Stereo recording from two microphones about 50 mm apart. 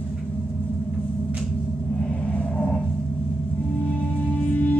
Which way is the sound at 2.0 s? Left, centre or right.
Left.